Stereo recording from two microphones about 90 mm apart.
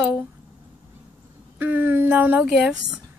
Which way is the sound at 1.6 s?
20° right (ahead or behind).